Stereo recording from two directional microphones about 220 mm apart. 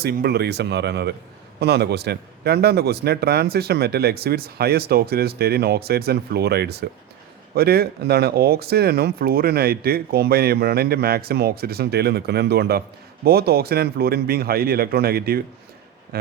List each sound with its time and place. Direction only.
0.0 s a man's voice: 45° right (ahead or behind)